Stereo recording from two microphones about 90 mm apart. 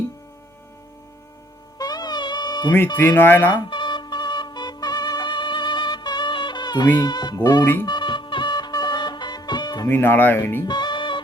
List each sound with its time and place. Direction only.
1.8 s music: 45° left (ahead or behind)
3.2 s speech: 20° left (ahead or behind)
3.5 s music: 60° left (ahead or behind)
7.0 s speech: 50° left (ahead or behind)
7.6 s speech: 25° left (ahead or behind)
7.9 s music: 55° left (ahead or behind)
9.9 s speech: 25° left (ahead or behind)
10.7 s music: 55° left (ahead or behind)